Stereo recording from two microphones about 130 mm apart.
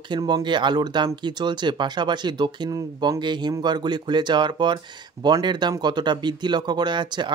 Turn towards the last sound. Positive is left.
turn(degrees=-35)  # may be behind; listen again after turning